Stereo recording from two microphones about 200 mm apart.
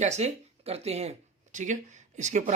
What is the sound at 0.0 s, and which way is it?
Speech, 35° right (ahead or behind).